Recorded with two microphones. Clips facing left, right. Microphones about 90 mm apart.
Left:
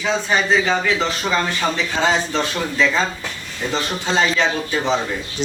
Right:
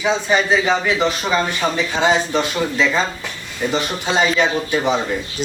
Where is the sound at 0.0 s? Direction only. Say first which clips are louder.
Right 2 dB; 15° right (ahead or behind).